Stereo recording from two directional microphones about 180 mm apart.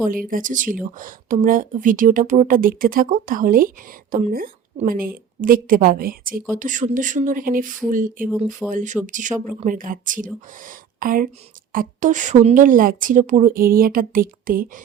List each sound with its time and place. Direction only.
0.1 s speech: 50° right (ahead or behind)